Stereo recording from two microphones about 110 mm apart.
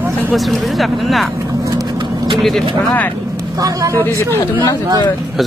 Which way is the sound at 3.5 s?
35° right (ahead or behind).